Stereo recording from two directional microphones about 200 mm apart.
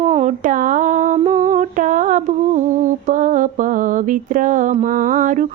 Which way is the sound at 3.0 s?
40° right (ahead or behind).